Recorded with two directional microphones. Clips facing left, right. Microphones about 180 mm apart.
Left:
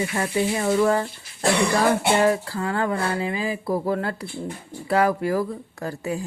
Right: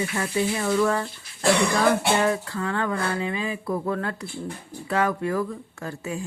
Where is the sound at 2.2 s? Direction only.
35° left (ahead or behind).